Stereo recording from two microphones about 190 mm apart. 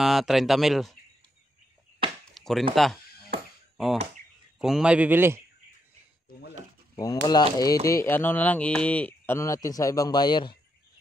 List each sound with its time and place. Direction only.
0.0 s speech: centre (ahead or behind)
2.0 s chop: 30° right (ahead or behind)
2.3 s a sound: centre (ahead or behind)
2.7 s a man's voice: centre (ahead or behind)
7.0 s speech: 20° left (ahead or behind)